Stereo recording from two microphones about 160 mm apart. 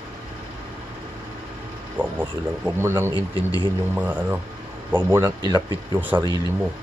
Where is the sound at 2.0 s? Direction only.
10° right (ahead or behind).